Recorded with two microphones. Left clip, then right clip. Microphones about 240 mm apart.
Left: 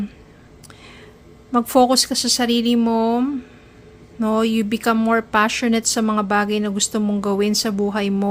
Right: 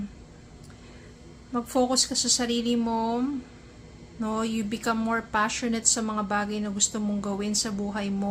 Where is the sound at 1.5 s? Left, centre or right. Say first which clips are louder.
Left 10 dB; left.